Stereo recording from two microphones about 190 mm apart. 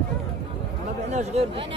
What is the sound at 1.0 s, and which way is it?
Speech, 35° right (ahead or behind).